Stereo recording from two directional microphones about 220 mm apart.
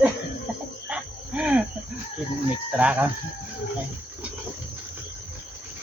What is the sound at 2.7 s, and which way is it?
Speech, 5° right (ahead or behind).